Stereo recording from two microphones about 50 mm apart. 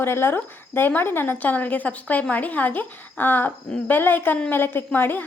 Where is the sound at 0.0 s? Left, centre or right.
Left.